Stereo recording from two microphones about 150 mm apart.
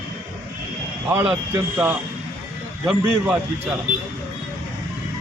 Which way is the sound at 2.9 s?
10° right (ahead or behind).